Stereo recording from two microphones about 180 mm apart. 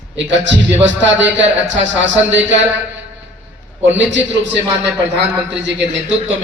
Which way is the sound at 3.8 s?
90° right.